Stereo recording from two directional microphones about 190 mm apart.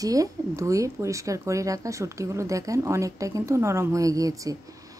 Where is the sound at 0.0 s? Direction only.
20° right (ahead or behind).